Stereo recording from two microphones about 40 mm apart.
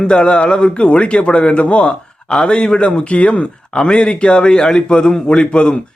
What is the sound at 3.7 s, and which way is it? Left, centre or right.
A man's voice, centre.